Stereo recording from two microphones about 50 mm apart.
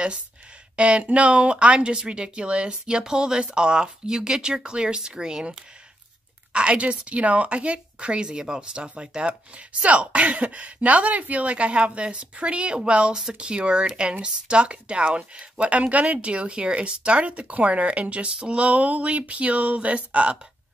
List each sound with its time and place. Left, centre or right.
0.7 s speech: right